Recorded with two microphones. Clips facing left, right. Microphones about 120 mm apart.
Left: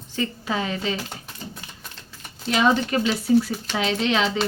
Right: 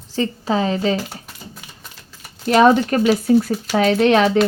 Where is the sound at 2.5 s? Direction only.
45° right (ahead or behind).